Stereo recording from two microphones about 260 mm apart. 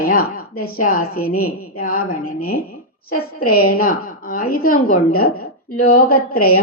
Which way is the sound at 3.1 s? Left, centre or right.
Left.